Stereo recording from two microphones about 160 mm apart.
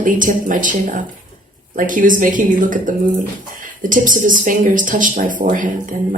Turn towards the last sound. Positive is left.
turn(degrees=-55)  # may be behind; listen again after turning